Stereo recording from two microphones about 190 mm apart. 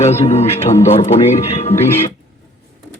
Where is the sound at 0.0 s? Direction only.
35° left (ahead or behind).